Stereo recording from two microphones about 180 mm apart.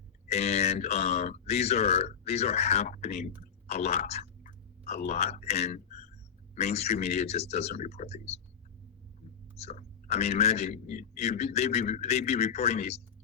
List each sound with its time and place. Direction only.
0.3 s a man's voice: 35° left (ahead or behind)
9.6 s a man's voice: 35° left (ahead or behind)